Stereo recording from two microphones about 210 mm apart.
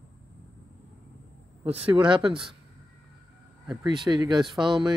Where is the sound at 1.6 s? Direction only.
30° right (ahead or behind).